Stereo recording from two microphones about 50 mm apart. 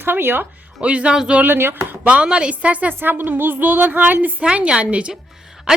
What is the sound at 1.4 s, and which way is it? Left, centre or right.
Speech, right.